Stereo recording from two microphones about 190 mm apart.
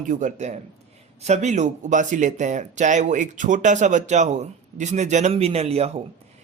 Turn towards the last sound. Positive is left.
turn(degrees=-35)  # may be behind; listen again after turning